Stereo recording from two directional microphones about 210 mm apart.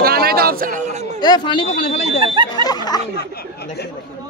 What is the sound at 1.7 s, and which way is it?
Speech, 35° left (ahead or behind).